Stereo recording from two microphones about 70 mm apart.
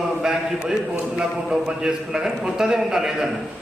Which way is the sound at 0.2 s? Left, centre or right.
Centre.